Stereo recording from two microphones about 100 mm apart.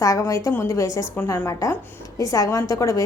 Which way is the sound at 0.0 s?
35° left (ahead or behind).